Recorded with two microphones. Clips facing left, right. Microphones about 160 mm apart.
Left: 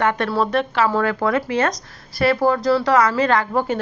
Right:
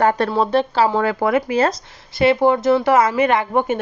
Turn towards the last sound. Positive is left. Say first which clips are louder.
# right 1 dB
turn(degrees=-20)  # may be behind; listen again after turning